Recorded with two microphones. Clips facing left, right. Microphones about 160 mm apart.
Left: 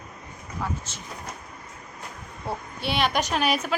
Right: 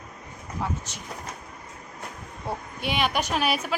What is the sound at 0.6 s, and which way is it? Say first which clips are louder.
Speech: right 1 dB; 15° right (ahead or behind).